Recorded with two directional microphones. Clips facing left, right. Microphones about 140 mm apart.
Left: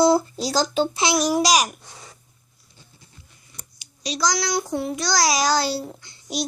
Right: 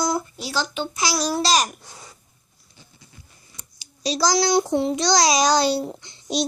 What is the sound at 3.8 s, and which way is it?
A child's voice, 35° right (ahead or behind).